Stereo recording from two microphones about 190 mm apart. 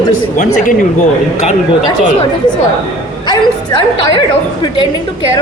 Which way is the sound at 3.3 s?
25° left (ahead or behind).